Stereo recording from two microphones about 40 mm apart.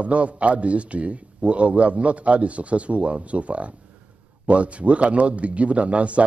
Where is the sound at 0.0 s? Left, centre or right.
Right.